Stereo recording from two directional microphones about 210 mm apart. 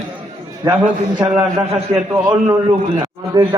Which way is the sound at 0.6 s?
10° right (ahead or behind).